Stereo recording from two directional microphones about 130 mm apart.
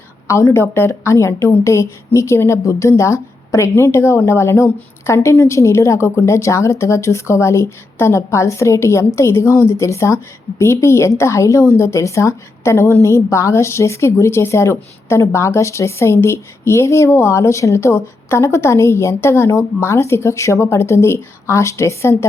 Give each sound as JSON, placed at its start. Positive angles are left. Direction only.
{"t": 0.3, "sound": "a woman's voice", "side_deg": 20}